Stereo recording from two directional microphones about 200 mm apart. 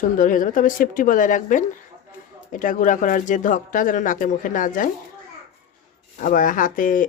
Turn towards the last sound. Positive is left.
turn(degrees=40)  # may be behind; listen again after turning